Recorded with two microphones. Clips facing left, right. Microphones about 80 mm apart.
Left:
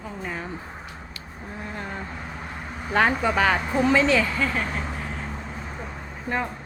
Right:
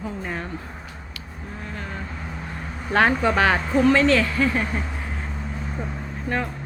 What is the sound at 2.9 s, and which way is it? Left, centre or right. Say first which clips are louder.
Speech: right 2 dB; centre.